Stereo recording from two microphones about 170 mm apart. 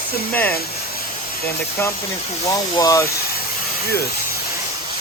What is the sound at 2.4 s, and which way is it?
Speech, 20° left (ahead or behind).